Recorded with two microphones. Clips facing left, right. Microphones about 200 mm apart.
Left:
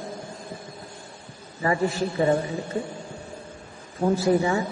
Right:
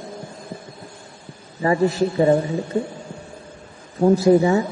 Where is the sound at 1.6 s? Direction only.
25° right (ahead or behind).